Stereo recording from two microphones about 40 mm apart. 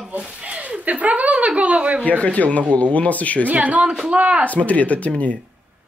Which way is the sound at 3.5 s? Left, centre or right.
Right.